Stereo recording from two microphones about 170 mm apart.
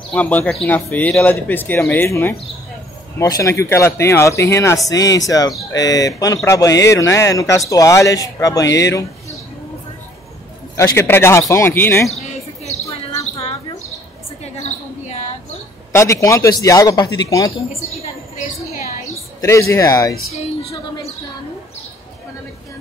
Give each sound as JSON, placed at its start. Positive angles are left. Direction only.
{"t": 0.1, "sound": "speech", "side_deg": 10}
{"t": 10.8, "sound": "speech", "side_deg": 15}
{"t": 14.4, "sound": "a sound", "side_deg": 40}
{"t": 15.9, "sound": "speech", "side_deg": 15}
{"t": 19.4, "sound": "speech", "side_deg": 15}